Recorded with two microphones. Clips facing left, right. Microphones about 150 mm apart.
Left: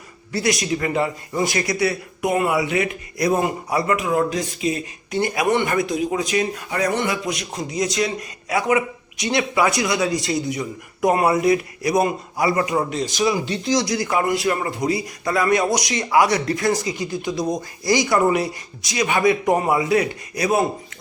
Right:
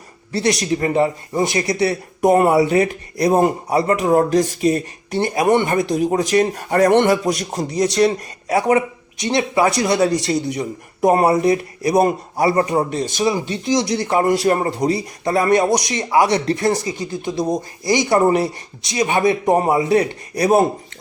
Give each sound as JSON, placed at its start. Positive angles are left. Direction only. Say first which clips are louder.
{"t": 0.3, "sound": "speech", "louder": "right 3 dB", "side_deg": -30}
{"t": 5.1, "sound": "speech", "louder": "right 4 dB", "side_deg": -30}
{"t": 5.9, "sound": "speech", "louder": "right 5 dB", "side_deg": -45}
{"t": 7.1, "sound": "speech", "louder": "right 8 dB", "side_deg": -40}